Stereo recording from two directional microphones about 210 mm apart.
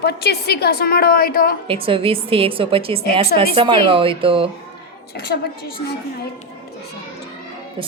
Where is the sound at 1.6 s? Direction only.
25° right (ahead or behind).